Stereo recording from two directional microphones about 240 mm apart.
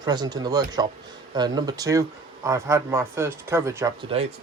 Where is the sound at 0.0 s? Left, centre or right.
Centre.